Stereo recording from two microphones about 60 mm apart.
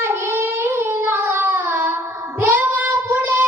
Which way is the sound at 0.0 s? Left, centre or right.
Right.